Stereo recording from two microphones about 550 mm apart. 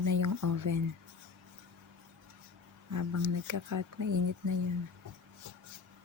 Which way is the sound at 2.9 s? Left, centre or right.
Right.